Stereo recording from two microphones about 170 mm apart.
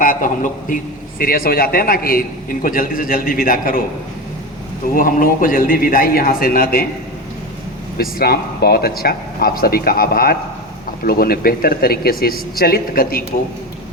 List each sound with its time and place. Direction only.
0.0 s a man's voice: 55° left (ahead or behind)
4.9 s a man's voice: 55° left (ahead or behind)
7.9 s a man's voice: 65° left (ahead or behind)